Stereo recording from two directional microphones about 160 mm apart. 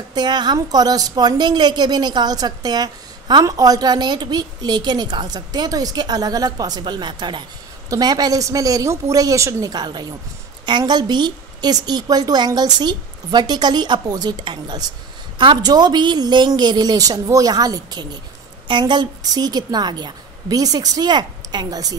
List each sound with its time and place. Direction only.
0.1 s a woman's voice: 25° right (ahead or behind)